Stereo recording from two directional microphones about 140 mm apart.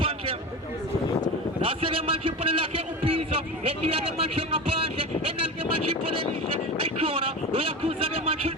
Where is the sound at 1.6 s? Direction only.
40° right (ahead or behind).